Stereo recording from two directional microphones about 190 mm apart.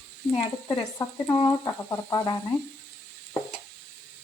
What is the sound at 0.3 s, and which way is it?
Speech, 15° left (ahead or behind).